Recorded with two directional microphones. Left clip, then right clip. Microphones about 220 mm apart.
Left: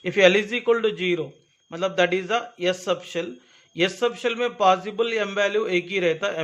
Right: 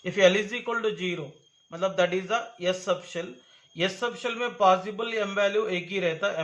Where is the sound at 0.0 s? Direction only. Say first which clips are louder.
Left 4 dB; 35° left (ahead or behind).